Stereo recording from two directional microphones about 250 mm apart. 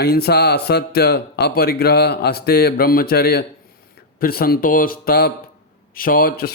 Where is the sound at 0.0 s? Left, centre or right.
Left.